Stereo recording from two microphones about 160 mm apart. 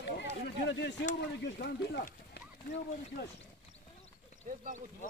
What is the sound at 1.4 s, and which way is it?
Speech, 90° left.